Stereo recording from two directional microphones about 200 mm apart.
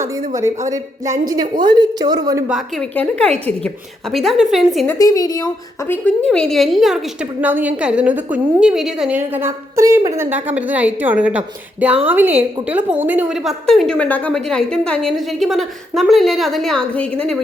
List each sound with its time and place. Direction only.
0.7 s a woman's voice: 15° right (ahead or behind)
2.5 s a woman's voice: centre (ahead or behind)
4.9 s a woman's voice: 20° left (ahead or behind)
5.9 s a woman's voice: 5° left (ahead or behind)